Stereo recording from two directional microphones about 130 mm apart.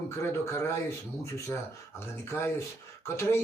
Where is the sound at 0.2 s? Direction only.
20° left (ahead or behind).